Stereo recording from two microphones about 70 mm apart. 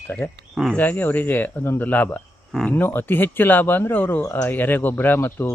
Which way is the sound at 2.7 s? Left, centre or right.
Left.